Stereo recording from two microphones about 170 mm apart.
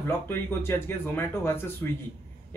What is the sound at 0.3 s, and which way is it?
Speech, 15° left (ahead or behind).